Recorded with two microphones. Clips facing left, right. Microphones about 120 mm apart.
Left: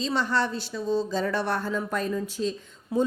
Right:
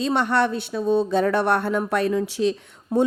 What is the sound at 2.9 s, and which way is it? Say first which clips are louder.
Speech: right 5 dB; 50° right (ahead or behind).